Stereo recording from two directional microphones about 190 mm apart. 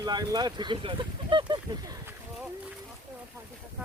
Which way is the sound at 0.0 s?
20° right (ahead or behind).